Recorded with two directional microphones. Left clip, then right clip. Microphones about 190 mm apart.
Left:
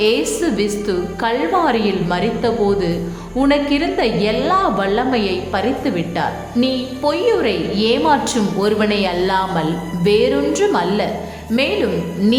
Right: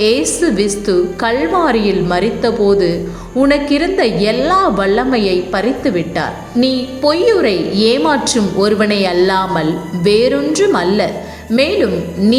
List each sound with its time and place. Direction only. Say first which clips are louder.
0.0 s a woman's voice: right 3 dB; 15° right (ahead or behind)